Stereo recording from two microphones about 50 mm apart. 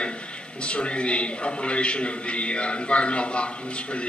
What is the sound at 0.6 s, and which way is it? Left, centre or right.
A man's voice, left.